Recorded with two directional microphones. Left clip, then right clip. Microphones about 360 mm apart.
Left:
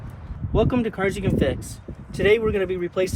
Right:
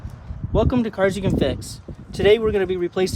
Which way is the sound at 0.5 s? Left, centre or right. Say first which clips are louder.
Right 1 dB; right.